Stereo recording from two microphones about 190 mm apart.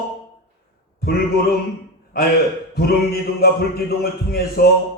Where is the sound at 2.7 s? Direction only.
55° left (ahead or behind).